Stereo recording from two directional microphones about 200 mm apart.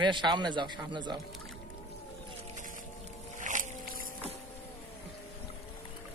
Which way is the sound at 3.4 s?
40° right (ahead or behind).